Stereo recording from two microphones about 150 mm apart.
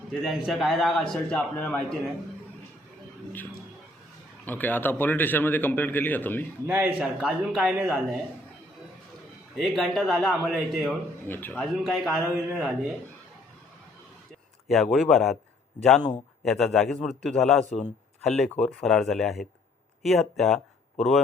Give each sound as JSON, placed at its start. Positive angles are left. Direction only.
{"t": 0.1, "sound": "a man's voice", "side_deg": 0}
{"t": 4.4, "sound": "speech", "side_deg": 10}
{"t": 6.7, "sound": "a man's voice", "side_deg": -10}
{"t": 9.6, "sound": "a man's voice", "side_deg": 0}
{"t": 11.3, "sound": "speech", "side_deg": 15}
{"t": 11.6, "sound": "a man's voice", "side_deg": 0}
{"t": 14.7, "sound": "a man's voice", "side_deg": 0}
{"t": 17.7, "sound": "a man's voice", "side_deg": 50}
{"t": 18.2, "sound": "a man's voice", "side_deg": 5}